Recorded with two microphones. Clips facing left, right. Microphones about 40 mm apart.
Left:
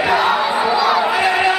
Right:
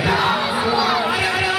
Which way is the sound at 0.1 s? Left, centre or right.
Centre.